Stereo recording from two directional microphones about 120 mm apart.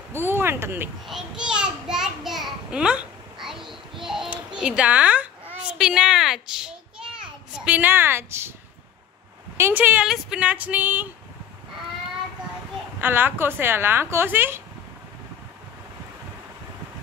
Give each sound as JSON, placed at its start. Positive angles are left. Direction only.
{"t": 0.1, "sound": "speech", "side_deg": -20}
{"t": 1.0, "sound": "a sound", "side_deg": -5}
{"t": 7.6, "sound": "a woman's voice", "side_deg": -15}
{"t": 9.6, "sound": "speech", "side_deg": -20}
{"t": 13.0, "sound": "speech", "side_deg": -15}